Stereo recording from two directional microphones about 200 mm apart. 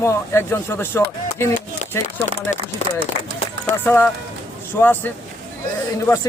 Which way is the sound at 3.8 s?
10° left (ahead or behind).